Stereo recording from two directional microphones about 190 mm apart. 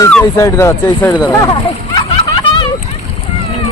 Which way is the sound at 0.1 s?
15° left (ahead or behind).